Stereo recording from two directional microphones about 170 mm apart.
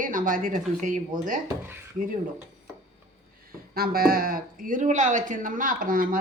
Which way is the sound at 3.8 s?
60° right (ahead or behind).